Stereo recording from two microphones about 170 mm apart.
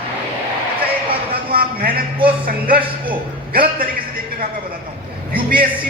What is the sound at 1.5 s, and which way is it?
A man's voice, 60° right (ahead or behind).